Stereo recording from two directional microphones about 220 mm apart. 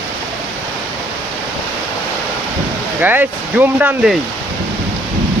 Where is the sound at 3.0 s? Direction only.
10° right (ahead or behind).